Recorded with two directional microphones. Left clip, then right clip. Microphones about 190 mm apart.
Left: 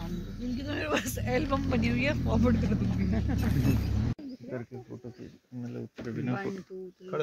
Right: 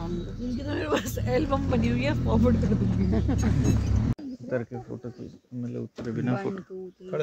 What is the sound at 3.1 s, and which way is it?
Speech, 55° right (ahead or behind).